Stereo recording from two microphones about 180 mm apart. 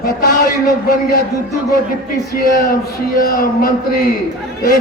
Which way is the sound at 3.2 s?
55° left (ahead or behind).